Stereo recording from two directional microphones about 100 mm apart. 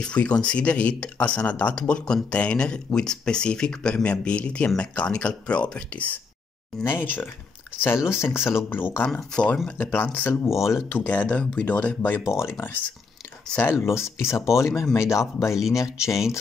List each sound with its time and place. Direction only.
0.0 s speech: 10° left (ahead or behind)
9.1 s speech: 10° left (ahead or behind)
13.9 s speech: 30° left (ahead or behind)